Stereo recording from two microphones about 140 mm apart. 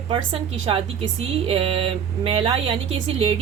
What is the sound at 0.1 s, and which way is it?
A woman's voice, 40° right (ahead or behind).